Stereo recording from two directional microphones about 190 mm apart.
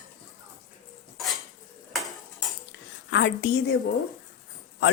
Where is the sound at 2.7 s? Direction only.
65° left (ahead or behind).